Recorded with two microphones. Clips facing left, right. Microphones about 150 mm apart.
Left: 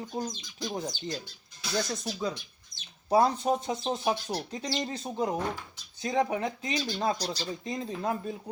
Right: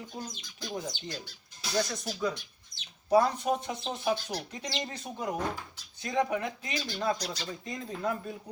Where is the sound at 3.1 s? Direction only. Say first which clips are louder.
Left 1 dB; 30° left (ahead or behind).